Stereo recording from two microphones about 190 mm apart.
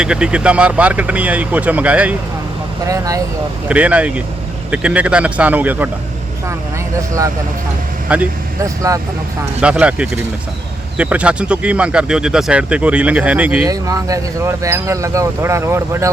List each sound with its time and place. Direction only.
0.0 s speech: 5° right (ahead or behind)
2.8 s speech: 20° right (ahead or behind)
3.7 s speech: 5° right (ahead or behind)
8.1 s speech: 10° right (ahead or behind)
9.6 s speech: 5° right (ahead or behind)
13.7 s speech: 20° right (ahead or behind)